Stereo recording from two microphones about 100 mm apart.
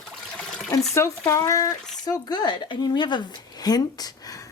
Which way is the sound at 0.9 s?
30° left (ahead or behind).